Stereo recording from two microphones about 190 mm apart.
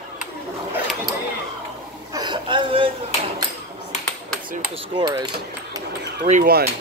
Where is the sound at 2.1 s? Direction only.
20° right (ahead or behind).